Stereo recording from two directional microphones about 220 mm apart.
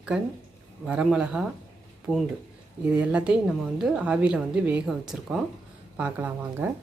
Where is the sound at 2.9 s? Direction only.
5° right (ahead or behind).